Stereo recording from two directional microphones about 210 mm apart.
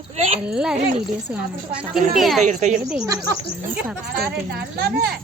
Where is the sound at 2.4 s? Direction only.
35° right (ahead or behind).